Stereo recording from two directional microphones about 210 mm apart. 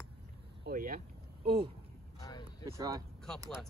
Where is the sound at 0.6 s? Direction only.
45° right (ahead or behind).